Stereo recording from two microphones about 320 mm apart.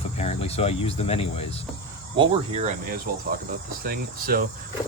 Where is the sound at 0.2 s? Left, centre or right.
Centre.